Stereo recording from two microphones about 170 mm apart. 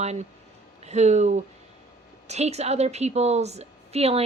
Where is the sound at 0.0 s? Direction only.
40° right (ahead or behind).